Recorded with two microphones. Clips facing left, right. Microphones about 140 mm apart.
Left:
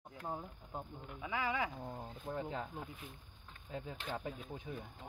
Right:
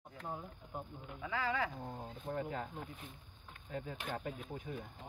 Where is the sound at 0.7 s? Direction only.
15° left (ahead or behind).